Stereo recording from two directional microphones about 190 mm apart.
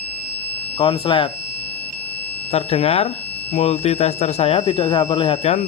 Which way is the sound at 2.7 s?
30° left (ahead or behind).